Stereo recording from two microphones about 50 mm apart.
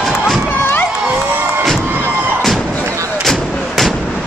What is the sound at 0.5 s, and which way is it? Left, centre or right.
Run, left.